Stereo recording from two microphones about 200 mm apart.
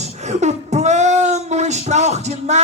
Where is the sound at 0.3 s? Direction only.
35° right (ahead or behind).